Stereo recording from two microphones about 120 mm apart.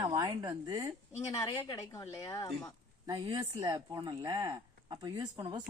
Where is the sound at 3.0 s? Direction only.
35° right (ahead or behind).